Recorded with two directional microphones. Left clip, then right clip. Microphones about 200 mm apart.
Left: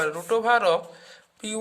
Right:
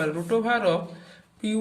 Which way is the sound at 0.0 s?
45° left (ahead or behind).